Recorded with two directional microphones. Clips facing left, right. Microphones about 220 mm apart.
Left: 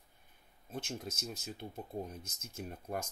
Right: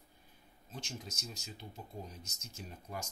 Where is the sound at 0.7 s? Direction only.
55° left (ahead or behind).